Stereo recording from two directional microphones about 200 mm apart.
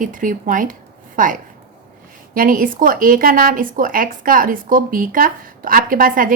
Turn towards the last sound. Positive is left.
turn(degrees=-45)  # may be behind; listen again after turning